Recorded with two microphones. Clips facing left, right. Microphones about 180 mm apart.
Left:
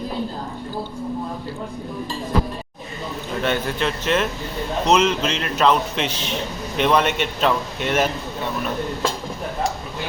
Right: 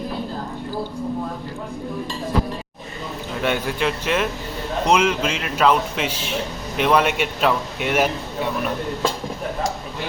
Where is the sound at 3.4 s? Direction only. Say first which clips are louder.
Right 1 dB; 10° right (ahead or behind).